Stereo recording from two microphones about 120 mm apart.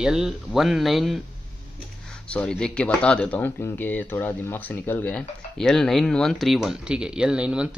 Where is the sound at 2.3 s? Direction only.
10° left (ahead or behind).